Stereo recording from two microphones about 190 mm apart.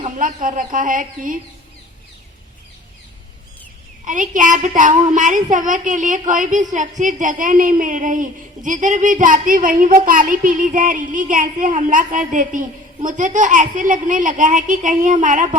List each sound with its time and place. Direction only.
0.0 s a sound: 45° right (ahead or behind)
0.4 s a woman's voice: 45° right (ahead or behind)
4.0 s a woman's voice: 45° right (ahead or behind)